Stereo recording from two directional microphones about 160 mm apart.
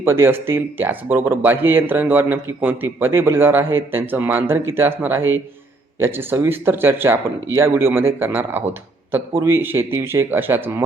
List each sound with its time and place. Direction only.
0.0 s speech: 15° right (ahead or behind)